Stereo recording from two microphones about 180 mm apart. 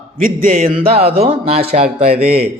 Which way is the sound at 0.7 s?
30° right (ahead or behind).